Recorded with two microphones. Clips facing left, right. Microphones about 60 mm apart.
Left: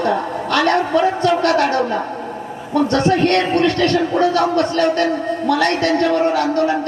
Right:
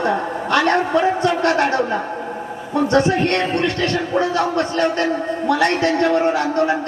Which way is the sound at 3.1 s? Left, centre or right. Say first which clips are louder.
Left 3 dB; centre.